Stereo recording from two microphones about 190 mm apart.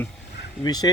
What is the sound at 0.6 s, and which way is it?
Speech, 20° left (ahead or behind).